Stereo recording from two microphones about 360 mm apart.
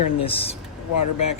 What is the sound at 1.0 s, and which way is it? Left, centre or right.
Speech, left.